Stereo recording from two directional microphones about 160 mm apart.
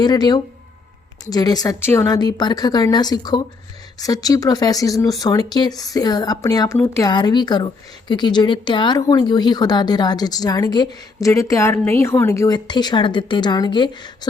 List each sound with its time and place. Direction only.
0.0 s a woman's voice: 25° left (ahead or behind)